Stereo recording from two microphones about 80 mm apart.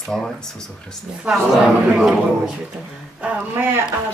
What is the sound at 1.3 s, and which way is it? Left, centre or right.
A man's voice, centre.